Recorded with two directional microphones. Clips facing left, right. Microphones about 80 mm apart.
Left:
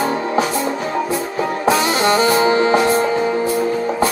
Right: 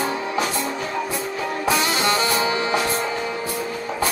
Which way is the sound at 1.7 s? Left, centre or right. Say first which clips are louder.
Left 6 dB; left.